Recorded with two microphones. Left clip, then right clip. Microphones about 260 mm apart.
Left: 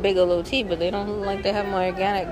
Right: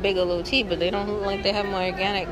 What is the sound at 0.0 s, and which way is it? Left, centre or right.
Speech, centre.